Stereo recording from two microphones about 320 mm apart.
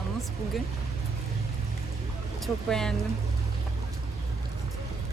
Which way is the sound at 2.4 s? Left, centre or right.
Centre.